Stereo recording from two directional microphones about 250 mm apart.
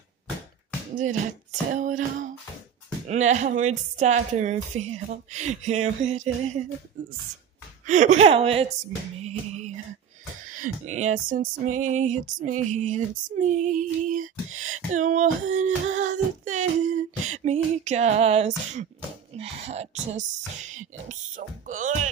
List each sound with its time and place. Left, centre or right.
0.9 s speech: right
7.8 s speech: right
10.5 s a sound: right
17.2 s speech: right